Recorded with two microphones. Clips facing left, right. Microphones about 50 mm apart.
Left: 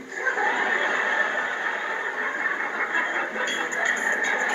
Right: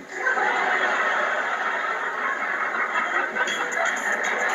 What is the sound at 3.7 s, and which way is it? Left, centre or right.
Music, right.